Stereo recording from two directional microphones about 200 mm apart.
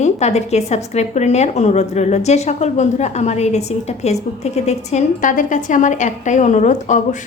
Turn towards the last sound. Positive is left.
turn(degrees=40)  # may be behind; listen again after turning